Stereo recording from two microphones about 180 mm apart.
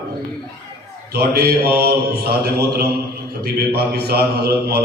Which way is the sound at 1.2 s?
60° right (ahead or behind).